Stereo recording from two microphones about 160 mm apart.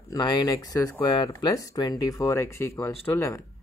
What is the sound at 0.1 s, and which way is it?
Speech, 25° left (ahead or behind).